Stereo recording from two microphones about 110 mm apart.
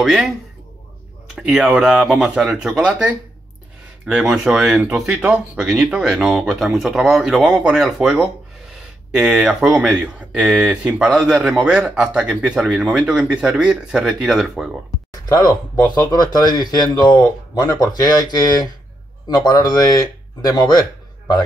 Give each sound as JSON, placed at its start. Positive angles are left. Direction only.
{"t": 0.0, "sound": "speech", "side_deg": -5}
{"t": 1.3, "sound": "speech", "side_deg": -5}
{"t": 15.2, "sound": "speech", "side_deg": 35}